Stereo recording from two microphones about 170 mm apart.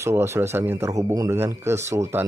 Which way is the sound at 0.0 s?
15° right (ahead or behind).